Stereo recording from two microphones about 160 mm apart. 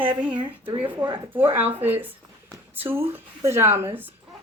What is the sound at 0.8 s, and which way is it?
Speech, 10° right (ahead or behind).